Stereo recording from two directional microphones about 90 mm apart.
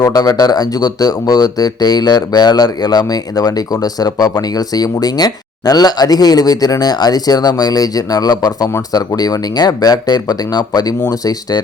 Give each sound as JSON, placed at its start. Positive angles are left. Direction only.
{"t": 0.0, "sound": "speech", "side_deg": 45}